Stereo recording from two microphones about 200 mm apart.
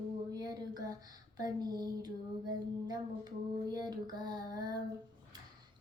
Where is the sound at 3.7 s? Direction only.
20° right (ahead or behind).